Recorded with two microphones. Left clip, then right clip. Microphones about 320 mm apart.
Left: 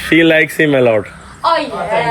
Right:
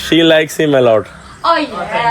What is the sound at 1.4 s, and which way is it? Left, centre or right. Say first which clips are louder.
Speech: right 1 dB; centre.